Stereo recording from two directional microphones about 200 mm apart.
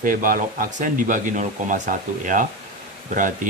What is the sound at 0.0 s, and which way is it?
Speech, 45° right (ahead or behind).